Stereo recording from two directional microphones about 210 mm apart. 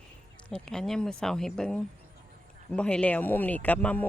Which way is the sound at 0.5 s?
Centre (ahead or behind).